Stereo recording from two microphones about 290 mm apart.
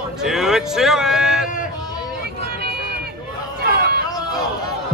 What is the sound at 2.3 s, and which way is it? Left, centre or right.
Vehicle, right.